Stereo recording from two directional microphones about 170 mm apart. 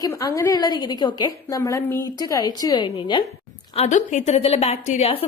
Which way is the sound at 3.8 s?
45° left (ahead or behind).